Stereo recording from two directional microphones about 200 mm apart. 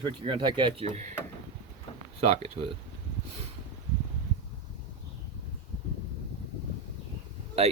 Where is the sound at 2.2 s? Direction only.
30° right (ahead or behind).